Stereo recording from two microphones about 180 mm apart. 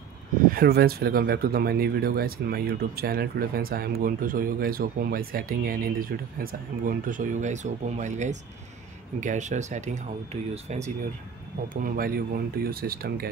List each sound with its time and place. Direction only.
0.5 s speech: 55° right (ahead or behind); by 10.8 s 35° right (ahead or behind)
11.7 s speech: 50° right (ahead or behind)